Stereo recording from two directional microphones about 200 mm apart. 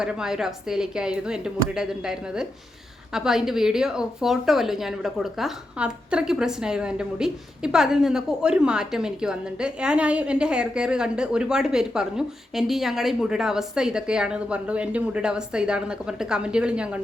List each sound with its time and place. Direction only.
0.0 s speech: 5° right (ahead or behind)